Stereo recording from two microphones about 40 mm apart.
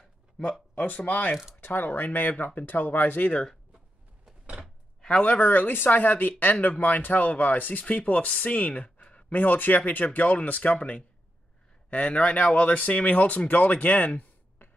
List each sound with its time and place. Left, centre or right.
0.7 s speech: left
1.6 s speech: left
5.2 s speech: left
8.0 s speech: left
9.3 s speech: left